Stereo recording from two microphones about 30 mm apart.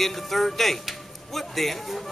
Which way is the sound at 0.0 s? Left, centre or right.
Centre.